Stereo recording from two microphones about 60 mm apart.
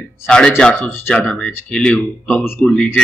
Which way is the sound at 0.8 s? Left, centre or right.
Left.